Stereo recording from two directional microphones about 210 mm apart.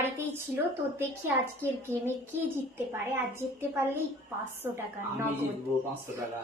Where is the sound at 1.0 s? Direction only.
10° right (ahead or behind).